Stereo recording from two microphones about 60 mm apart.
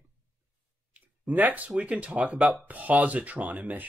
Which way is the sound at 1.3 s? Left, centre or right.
Right.